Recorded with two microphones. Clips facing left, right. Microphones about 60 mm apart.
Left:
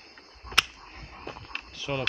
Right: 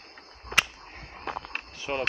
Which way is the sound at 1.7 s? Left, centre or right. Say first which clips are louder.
Right 1 dB; right.